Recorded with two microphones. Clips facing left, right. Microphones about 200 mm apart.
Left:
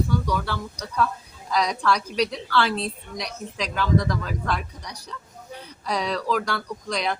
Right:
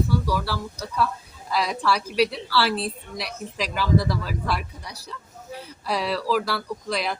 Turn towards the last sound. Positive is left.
turn(degrees=-5)  # may be behind; listen again after turning